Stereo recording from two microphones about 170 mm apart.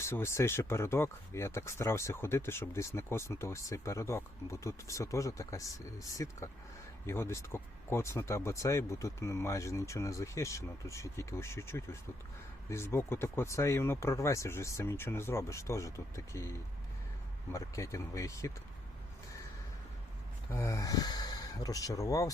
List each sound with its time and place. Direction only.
0.0 s speech: 15° left (ahead or behind)
20.5 s speech: 15° left (ahead or behind)